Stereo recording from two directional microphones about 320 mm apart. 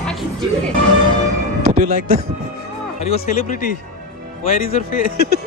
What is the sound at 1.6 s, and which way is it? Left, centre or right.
Music, right.